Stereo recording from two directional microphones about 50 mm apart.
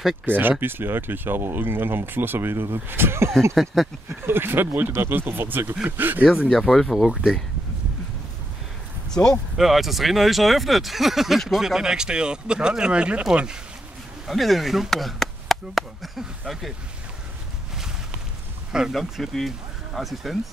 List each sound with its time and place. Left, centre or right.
0.2 s speech: right
3.5 s speech: centre
4.3 s speech: right
6.5 s speech: centre
9.1 s speech: centre
9.6 s speech: centre; by 13.6 s right
14.2 s speech: centre
18.7 s speech: centre
18.9 s speech: centre